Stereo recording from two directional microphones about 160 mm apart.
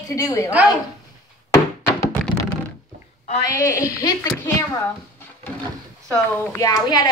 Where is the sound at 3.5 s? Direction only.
20° left (ahead or behind).